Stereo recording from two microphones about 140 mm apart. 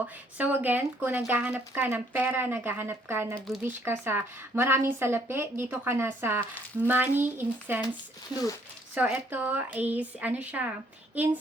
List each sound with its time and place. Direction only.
0.0 s speech: 10° right (ahead or behind)
3.3 s speech: centre (ahead or behind)
3.7 s speech: 15° right (ahead or behind)
9.0 s speech: 10° right (ahead or behind)